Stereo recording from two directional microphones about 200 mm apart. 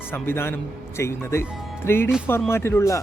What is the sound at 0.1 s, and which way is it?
A man's voice, 10° left (ahead or behind).